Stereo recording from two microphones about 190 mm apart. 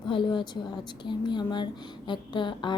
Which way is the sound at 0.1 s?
25° left (ahead or behind).